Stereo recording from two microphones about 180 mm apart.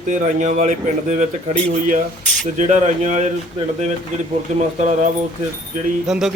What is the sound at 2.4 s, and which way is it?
Speech, 40° right (ahead or behind).